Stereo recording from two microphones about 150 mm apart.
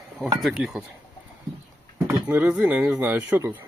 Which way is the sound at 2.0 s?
10° right (ahead or behind).